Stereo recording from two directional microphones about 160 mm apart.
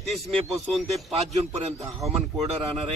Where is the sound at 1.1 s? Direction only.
45° right (ahead or behind).